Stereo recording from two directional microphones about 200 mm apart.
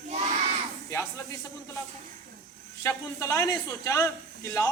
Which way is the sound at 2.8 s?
15° left (ahead or behind).